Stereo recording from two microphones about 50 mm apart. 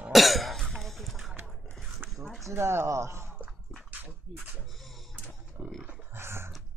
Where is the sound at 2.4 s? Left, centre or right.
Right.